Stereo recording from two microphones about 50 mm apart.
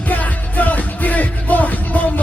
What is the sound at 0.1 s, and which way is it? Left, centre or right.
Music, left.